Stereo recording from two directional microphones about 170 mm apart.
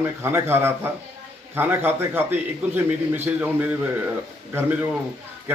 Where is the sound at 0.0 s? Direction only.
15° right (ahead or behind).